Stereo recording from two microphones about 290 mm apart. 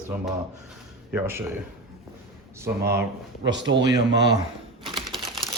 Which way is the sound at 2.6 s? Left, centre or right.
Centre.